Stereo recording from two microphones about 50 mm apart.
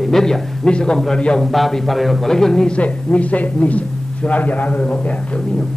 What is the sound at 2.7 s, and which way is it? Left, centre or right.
A woman's voice, left.